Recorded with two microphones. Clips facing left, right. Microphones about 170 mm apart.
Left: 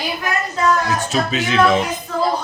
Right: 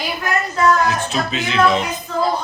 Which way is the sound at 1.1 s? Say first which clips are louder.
Left 2 dB; 45° left (ahead or behind).